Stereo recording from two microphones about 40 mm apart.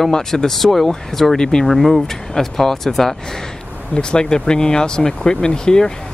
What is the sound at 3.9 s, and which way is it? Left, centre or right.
Speech, left.